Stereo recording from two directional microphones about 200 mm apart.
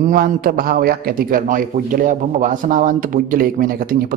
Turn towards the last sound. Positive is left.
turn(degrees=-45)  # may be behind; listen again after turning